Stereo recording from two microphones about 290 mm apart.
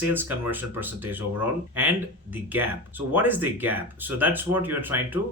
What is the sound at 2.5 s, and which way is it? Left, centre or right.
Speech, centre.